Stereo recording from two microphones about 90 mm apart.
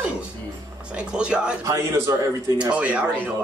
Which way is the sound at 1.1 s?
10° right (ahead or behind).